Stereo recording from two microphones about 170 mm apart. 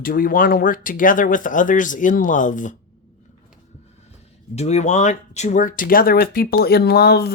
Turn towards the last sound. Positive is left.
turn(degrees=70)  # may be behind; listen again after turning